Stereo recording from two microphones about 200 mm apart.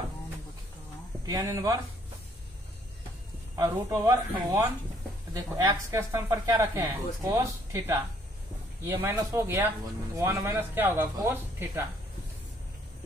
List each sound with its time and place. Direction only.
1.2 s speech: 15° right (ahead or behind)
3.5 s speech: 15° right (ahead or behind)